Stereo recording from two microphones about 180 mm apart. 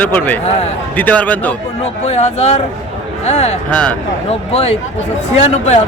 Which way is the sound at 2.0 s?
35° left (ahead or behind).